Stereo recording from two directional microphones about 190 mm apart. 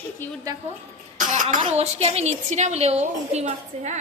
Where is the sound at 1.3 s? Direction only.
45° right (ahead or behind).